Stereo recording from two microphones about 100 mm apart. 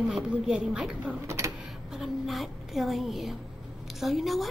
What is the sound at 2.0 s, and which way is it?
A woman's voice, centre (ahead or behind).